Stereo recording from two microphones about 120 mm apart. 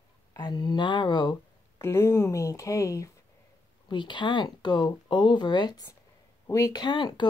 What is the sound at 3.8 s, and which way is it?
Speech, 40° left (ahead or behind).